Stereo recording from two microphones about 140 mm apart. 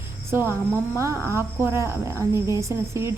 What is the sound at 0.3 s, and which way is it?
Speech, 15° right (ahead or behind).